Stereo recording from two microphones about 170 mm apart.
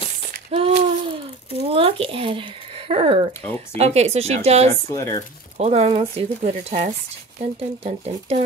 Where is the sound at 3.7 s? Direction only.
40° right (ahead or behind).